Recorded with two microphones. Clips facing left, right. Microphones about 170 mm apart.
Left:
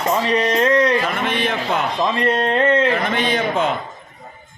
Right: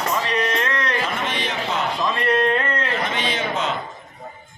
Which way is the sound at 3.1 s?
55° left (ahead or behind).